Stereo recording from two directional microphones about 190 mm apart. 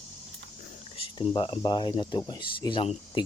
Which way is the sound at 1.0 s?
30° left (ahead or behind).